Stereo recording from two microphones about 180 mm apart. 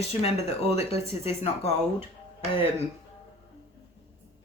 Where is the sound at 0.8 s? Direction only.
35° left (ahead or behind).